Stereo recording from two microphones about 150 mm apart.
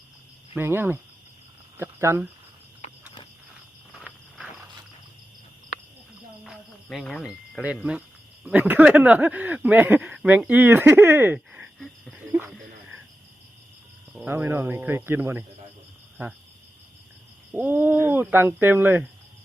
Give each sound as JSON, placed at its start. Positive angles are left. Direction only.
{"t": 0.5, "sound": "speech", "side_deg": -15}
{"t": 3.9, "sound": "a sound", "side_deg": 0}
{"t": 6.9, "sound": "speech", "side_deg": 5}
{"t": 11.3, "sound": "wheeze", "side_deg": -5}
{"t": 14.2, "sound": "speech", "side_deg": -15}
{"t": 17.5, "sound": "speech", "side_deg": -10}